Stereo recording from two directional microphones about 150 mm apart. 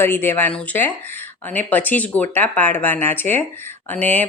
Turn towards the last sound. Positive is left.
turn(degrees=10)  # may be behind; listen again after turning